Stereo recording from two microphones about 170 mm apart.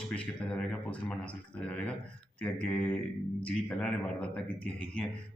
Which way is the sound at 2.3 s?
10° left (ahead or behind).